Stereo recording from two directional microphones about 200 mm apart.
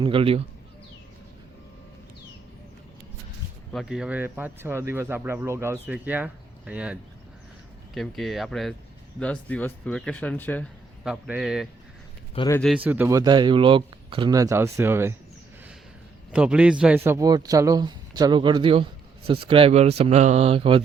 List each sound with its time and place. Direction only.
0.0 s speech: 25° right (ahead or behind)
3.7 s speech: centre (ahead or behind)
11.0 s speech: 5° right (ahead or behind)
12.7 s speech: 10° right (ahead or behind)
16.3 s speech: 5° right (ahead or behind); by 20.8 s 25° right (ahead or behind)